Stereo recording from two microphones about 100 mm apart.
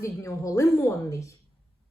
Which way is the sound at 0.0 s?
30° left (ahead or behind).